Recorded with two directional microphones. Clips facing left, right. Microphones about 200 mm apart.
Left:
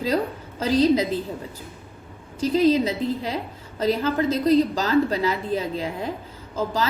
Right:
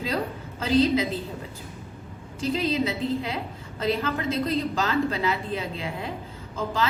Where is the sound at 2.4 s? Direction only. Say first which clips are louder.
Left 6 dB; 40° left (ahead or behind).